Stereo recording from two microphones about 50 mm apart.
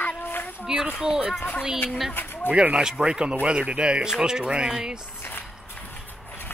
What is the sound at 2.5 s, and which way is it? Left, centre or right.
Speech, right.